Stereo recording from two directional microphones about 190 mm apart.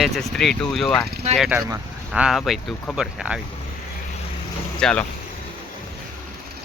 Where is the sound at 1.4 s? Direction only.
10° right (ahead or behind).